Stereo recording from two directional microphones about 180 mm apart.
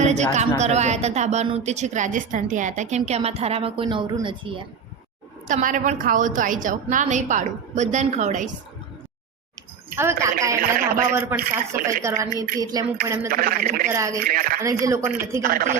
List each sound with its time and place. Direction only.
0.0 s a woman's voice: 40° right (ahead or behind)
5.5 s a woman's voice: 45° right (ahead or behind)
9.9 s a woman's voice: 15° right (ahead or behind)
10.5 s a woman's voice: 50° right (ahead or behind)
10.9 s speech: 15° right (ahead or behind)
12.5 s a sound: 20° right (ahead or behind)
13.3 s a woman's voice: 50° right (ahead or behind)
13.9 s speech: 15° right (ahead or behind)
14.2 s a woman's voice: 50° right (ahead or behind)
14.6 s speech: 15° right (ahead or behind)
15.4 s a woman's voice: 50° right (ahead or behind)